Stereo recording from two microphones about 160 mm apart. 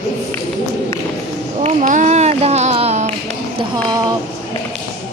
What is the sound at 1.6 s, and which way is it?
Speech, 50° right (ahead or behind).